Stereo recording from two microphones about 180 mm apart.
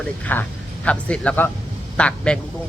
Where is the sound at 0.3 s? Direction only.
10° left (ahead or behind).